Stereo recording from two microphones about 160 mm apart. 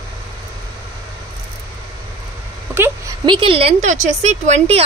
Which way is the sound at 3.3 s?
35° right (ahead or behind).